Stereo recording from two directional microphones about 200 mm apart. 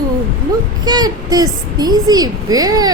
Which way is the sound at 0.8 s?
20° right (ahead or behind).